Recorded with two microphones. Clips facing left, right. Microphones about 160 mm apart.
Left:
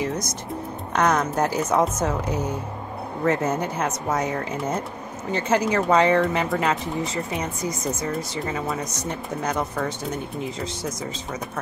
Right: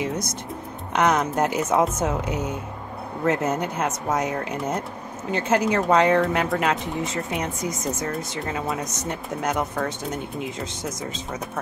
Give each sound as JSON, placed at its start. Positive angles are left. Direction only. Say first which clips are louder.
{"t": 0.9, "sound": "speech", "louder": "even", "side_deg": -5}